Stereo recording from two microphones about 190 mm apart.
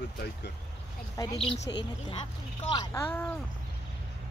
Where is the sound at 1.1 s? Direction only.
20° left (ahead or behind).